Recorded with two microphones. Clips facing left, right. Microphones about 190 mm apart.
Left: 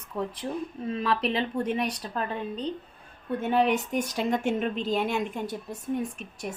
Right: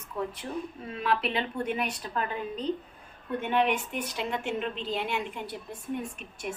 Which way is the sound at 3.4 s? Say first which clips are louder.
Left 3 dB; 35° left (ahead or behind).